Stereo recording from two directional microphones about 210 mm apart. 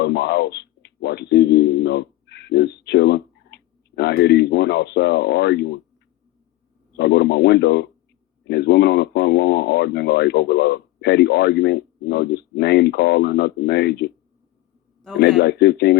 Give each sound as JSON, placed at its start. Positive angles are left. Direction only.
{"t": 0.0, "sound": "speech", "side_deg": 50}
{"t": 6.9, "sound": "speech", "side_deg": 50}
{"t": 15.4, "sound": "speech", "side_deg": 50}